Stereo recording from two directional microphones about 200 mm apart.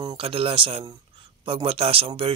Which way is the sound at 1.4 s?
30° right (ahead or behind).